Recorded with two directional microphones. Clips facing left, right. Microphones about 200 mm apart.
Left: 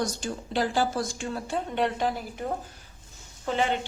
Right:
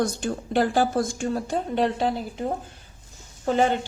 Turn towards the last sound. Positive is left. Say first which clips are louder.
# right 5 dB
turn(degrees=-45)  # may be behind; listen again after turning